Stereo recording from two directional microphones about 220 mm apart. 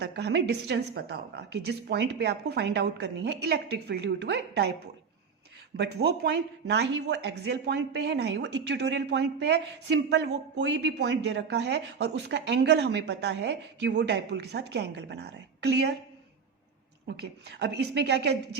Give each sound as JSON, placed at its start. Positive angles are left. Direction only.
{"t": 0.0, "sound": "speech", "side_deg": -50}
{"t": 5.7, "sound": "speech", "side_deg": -50}
{"t": 17.2, "sound": "speech", "side_deg": -50}